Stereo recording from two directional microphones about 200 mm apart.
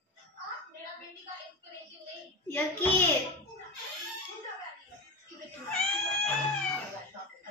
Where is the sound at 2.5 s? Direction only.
10° left (ahead or behind).